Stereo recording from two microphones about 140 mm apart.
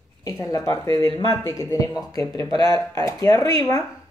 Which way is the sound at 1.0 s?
40° right (ahead or behind).